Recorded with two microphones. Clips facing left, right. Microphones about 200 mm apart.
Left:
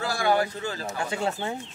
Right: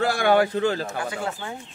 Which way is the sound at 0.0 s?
60° right (ahead or behind).